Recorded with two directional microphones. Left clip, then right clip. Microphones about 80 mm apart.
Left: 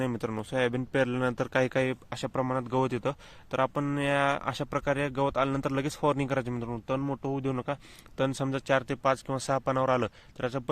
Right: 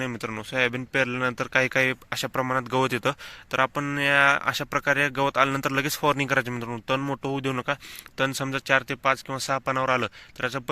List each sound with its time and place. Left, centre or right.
0.3 s speech: left
1.7 s speech: centre
2.5 s speech: centre
3.5 s speech: left
6.8 s speech: centre
7.5 s speech: centre
8.2 s speech: left